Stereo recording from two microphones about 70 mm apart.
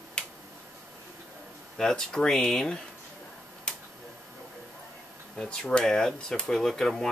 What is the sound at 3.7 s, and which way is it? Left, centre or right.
Tick-tock, centre.